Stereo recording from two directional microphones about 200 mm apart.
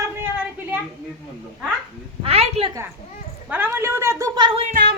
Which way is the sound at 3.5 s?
10° right (ahead or behind).